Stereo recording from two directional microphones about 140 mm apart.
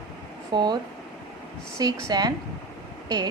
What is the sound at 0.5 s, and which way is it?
Speech, 30° right (ahead or behind).